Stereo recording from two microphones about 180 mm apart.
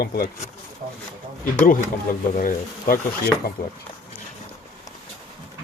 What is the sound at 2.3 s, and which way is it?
Speech, 50° left (ahead or behind).